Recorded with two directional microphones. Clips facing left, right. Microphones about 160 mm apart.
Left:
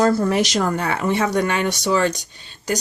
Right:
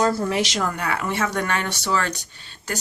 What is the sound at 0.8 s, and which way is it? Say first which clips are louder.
Speech: left 4 dB; 25° left (ahead or behind).